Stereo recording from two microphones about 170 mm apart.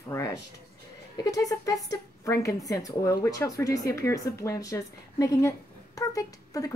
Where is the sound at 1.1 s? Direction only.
20° left (ahead or behind).